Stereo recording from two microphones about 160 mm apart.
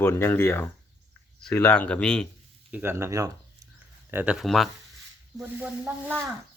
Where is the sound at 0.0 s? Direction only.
15° left (ahead or behind).